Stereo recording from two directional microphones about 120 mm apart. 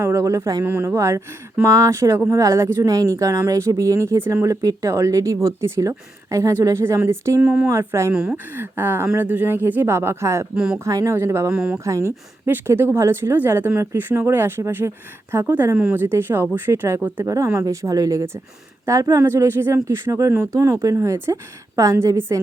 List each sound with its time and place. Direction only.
0.0 s a woman's voice: 25° right (ahead or behind)
8.1 s speech: 5° right (ahead or behind)
8.5 s a woman's voice: 15° right (ahead or behind)
10.5 s speech: 5° right (ahead or behind)
10.8 s a woman's voice: 25° right (ahead or behind)
11.5 s speech: 10° right (ahead or behind)
11.9 s a woman's voice: 25° right (ahead or behind)